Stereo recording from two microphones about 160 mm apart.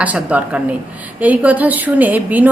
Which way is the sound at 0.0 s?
10° right (ahead or behind).